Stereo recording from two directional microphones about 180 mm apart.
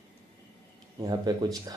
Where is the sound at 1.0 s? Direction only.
20° right (ahead or behind).